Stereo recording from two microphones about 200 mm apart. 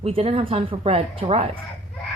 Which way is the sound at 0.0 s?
30° right (ahead or behind).